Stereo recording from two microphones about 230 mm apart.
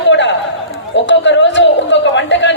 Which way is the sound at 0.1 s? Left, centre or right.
Left.